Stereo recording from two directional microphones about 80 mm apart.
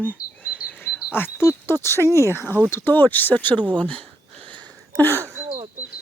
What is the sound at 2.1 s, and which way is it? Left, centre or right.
Speech, left.